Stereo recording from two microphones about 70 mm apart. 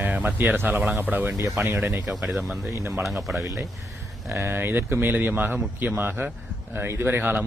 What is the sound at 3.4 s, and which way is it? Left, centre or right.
Speech, right.